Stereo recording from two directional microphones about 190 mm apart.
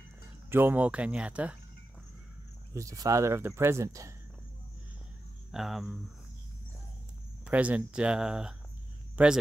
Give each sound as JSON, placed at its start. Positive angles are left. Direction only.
{"t": 0.5, "sound": "speech", "side_deg": -10}
{"t": 2.7, "sound": "speech", "side_deg": -15}
{"t": 5.5, "sound": "speech", "side_deg": 0}
{"t": 7.4, "sound": "speech", "side_deg": -5}